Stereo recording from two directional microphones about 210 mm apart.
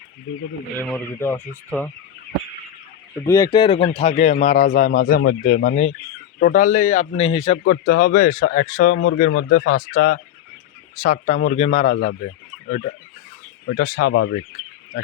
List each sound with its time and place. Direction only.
0.8 s speech: 10° left (ahead or behind)
3.2 s speech: 15° left (ahead or behind)
7.7 s speech: 45° left (ahead or behind)
12.0 s fowl: 40° left (ahead or behind)
13.7 s speech: 45° left (ahead or behind)